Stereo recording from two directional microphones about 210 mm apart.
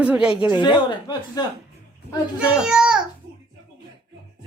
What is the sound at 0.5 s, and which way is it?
Speech, 20° left (ahead or behind).